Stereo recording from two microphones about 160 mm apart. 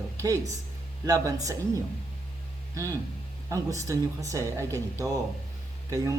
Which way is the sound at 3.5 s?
20° right (ahead or behind).